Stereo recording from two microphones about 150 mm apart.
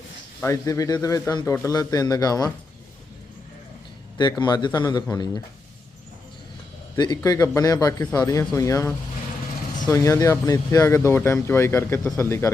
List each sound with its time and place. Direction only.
0.4 s speech: 20° left (ahead or behind)
4.2 s speech: 30° left (ahead or behind)
6.9 s speech: 25° left (ahead or behind)